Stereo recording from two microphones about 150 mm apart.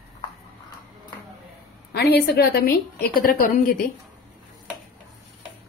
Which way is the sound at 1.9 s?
90° left.